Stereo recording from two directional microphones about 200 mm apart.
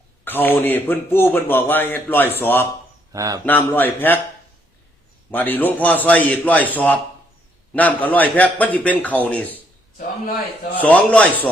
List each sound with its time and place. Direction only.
0.3 s speech: 10° left (ahead or behind)
3.1 s speech: 15° right (ahead or behind)
3.4 s speech: 10° left (ahead or behind)
5.3 s speech: 10° left (ahead or behind)
10.8 s speech: 5° left (ahead or behind)